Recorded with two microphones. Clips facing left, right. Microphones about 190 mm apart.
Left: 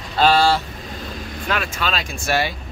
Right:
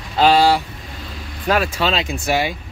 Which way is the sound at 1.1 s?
45° left (ahead or behind).